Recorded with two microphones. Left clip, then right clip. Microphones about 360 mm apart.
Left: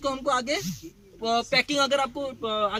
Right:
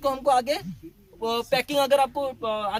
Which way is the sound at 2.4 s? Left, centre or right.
Centre.